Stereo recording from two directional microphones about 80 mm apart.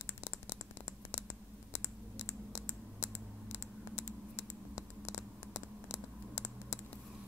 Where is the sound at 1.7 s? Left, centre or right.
Left.